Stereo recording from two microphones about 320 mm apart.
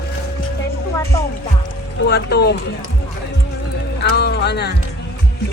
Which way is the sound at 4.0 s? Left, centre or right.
Left.